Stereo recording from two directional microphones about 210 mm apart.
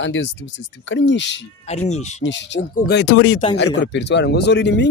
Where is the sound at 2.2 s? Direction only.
55° left (ahead or behind).